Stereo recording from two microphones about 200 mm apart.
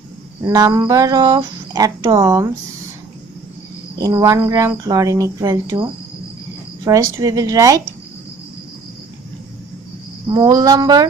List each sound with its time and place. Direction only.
0.5 s speech: 20° right (ahead or behind)
4.0 s speech: 15° right (ahead or behind)
10.2 s speech: 20° right (ahead or behind)